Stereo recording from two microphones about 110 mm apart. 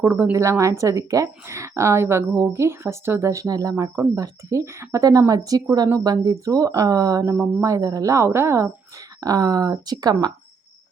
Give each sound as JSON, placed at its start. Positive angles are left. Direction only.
{"t": 0.0, "sound": "speech", "side_deg": -25}